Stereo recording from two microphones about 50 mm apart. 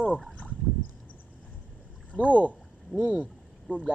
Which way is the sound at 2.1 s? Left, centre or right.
Left.